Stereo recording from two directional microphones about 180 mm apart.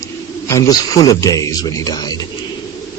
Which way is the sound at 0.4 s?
20° left (ahead or behind).